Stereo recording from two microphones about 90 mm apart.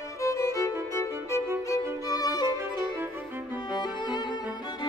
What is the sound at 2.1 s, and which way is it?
Music, 45° left (ahead or behind).